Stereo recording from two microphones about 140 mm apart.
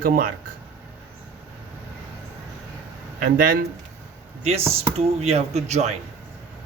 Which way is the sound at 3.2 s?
85° right.